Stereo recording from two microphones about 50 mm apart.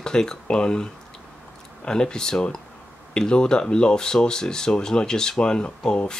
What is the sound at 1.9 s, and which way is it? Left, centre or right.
Speech, centre.